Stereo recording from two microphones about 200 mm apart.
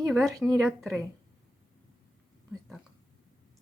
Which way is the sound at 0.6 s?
Centre (ahead or behind).